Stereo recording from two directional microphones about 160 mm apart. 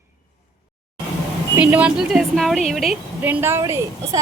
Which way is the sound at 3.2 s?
10° right (ahead or behind).